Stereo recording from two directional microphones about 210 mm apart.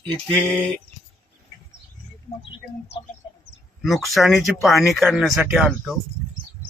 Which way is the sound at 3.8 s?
Centre (ahead or behind).